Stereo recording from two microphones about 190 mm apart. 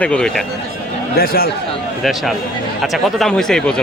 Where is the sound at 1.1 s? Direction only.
50° left (ahead or behind).